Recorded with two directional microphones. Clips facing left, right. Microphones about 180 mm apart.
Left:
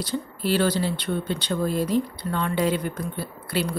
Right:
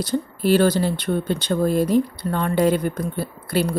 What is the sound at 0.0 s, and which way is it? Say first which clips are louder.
Speech: right 6 dB; 45° right (ahead or behind).